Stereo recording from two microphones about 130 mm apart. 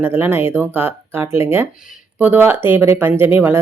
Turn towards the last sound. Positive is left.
turn(degrees=-15)  # may be behind; listen again after turning